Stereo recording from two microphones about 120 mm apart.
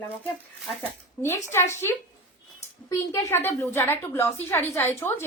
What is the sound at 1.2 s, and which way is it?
A woman's voice, 20° left (ahead or behind).